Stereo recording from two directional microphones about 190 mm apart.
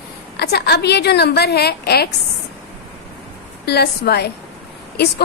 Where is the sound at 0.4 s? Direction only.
60° left (ahead or behind).